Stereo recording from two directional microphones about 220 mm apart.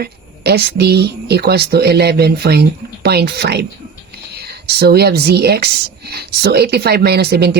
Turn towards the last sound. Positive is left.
turn(degrees=-45)  # may be behind; listen again after turning